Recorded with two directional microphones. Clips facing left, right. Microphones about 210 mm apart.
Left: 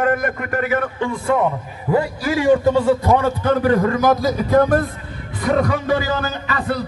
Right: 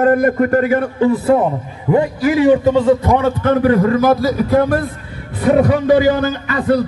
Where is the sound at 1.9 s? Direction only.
20° right (ahead or behind).